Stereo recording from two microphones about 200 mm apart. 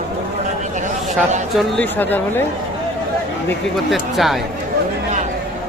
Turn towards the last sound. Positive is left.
turn(degrees=0)  # may be behind; listen again after turning